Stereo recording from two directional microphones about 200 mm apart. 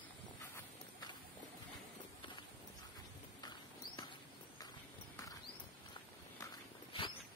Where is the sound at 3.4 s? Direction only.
20° left (ahead or behind).